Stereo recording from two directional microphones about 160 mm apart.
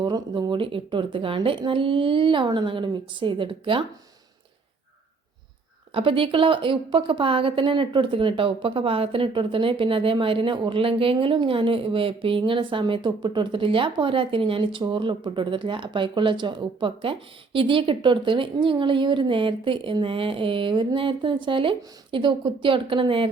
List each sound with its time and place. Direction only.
0.0 s a woman's voice: 30° right (ahead or behind)
5.9 s a woman's voice: 35° right (ahead or behind)